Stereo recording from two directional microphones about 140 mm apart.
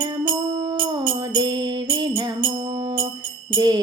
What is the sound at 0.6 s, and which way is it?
Music, 25° right (ahead or behind).